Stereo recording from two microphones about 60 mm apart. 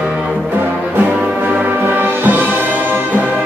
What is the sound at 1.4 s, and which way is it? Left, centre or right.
Music, right.